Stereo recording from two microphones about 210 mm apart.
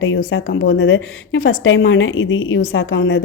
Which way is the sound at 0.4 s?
60° left (ahead or behind).